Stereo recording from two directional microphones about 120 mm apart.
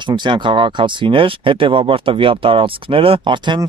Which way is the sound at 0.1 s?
40° right (ahead or behind).